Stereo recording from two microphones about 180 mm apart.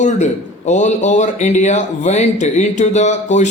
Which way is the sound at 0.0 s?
40° left (ahead or behind).